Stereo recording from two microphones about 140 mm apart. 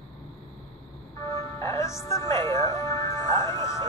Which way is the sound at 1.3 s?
20° left (ahead or behind).